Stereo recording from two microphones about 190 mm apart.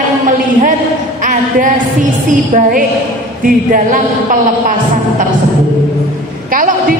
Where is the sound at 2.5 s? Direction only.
45° right (ahead or behind).